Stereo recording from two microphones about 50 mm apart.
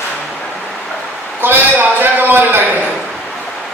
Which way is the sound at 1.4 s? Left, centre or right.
Right.